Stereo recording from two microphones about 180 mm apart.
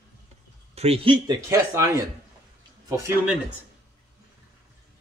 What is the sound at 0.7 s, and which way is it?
Speech, 35° right (ahead or behind).